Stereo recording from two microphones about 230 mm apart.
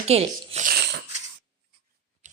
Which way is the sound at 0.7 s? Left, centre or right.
Right.